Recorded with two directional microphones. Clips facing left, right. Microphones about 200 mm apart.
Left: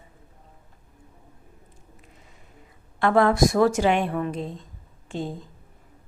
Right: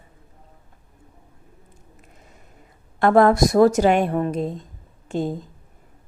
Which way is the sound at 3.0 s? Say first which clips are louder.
Right 4 dB; 45° right (ahead or behind).